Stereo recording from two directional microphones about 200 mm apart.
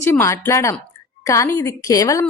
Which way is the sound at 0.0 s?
10° left (ahead or behind).